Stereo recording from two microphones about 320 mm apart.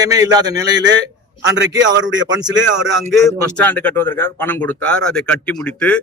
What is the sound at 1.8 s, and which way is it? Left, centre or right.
Speech, right.